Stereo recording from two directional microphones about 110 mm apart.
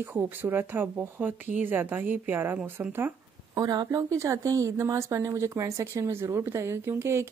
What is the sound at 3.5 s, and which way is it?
A woman's voice, 35° right (ahead or behind).